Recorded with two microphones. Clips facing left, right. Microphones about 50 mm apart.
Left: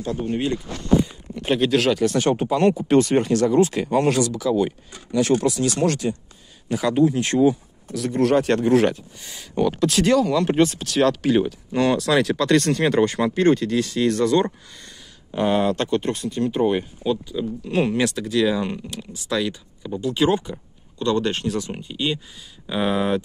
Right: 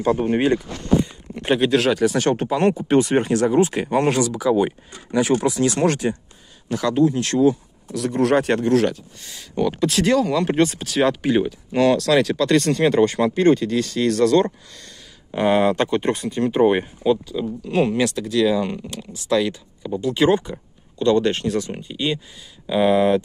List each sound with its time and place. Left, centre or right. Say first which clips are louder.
0.3 s speech: right 3 dB; right
1.4 s speech: right 1 dB; centre
2.8 s speech: even; centre; by 4.0 s right
4.2 s speech: right 2 dB; centre
6.0 s speech: right 2 dB; right
6.7 s speech: even; centre
7.9 s speech: right 1 dB; centre
8.6 s speech: left 1 dB; centre
9.6 s speech: even; centre
14.7 s speech: right 1 dB; left
15.3 s speech: right 3 dB; centre; by 16.9 s right
17.4 s speech: right 2 dB; centre